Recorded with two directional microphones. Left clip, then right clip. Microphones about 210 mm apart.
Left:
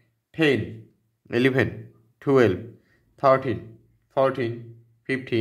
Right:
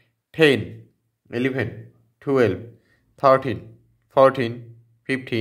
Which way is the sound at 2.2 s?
5° left (ahead or behind).